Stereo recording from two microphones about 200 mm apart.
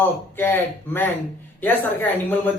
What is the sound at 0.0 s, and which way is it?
Speech, 10° left (ahead or behind).